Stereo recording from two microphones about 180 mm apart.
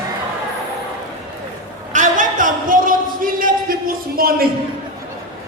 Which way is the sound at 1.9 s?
45° right (ahead or behind).